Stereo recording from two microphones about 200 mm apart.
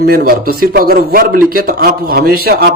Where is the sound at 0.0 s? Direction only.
45° right (ahead or behind).